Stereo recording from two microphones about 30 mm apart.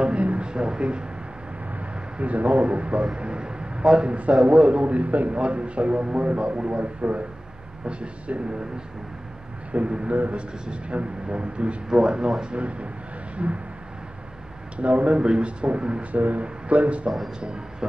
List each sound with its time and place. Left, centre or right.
0.2 s a sound: right
0.5 s a sound: right
1.8 s a sound: right
2.6 s a man's voice: right
5.3 s a man's voice: right
7.8 s a man's voice: right
11.9 s speech: right
12.4 s a man's voice: right
14.8 s a man's voice: right
16.2 s a man's voice: right
17.4 s a man's voice: right